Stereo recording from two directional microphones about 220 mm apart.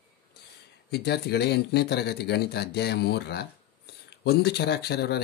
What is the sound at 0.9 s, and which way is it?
Speech, 50° left (ahead or behind).